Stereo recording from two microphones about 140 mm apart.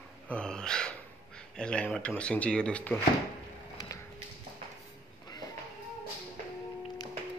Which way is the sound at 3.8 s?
30° left (ahead or behind).